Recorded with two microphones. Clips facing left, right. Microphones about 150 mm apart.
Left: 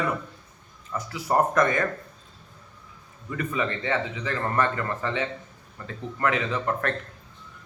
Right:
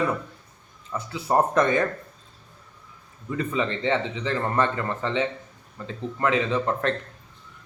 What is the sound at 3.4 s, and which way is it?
Speech, 25° right (ahead or behind).